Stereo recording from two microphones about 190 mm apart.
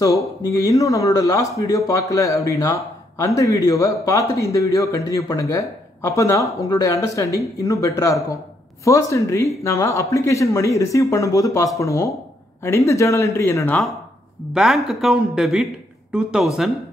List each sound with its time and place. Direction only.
0.5 s speech: 15° left (ahead or behind)
14.5 s speech: centre (ahead or behind)